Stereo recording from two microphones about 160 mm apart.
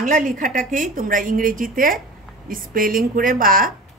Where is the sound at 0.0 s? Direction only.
55° right (ahead or behind).